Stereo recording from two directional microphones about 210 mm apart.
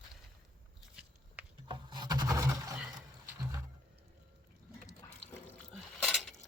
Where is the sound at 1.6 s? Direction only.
20° right (ahead or behind).